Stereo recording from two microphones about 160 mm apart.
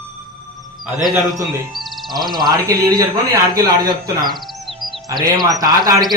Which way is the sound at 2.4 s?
20° right (ahead or behind).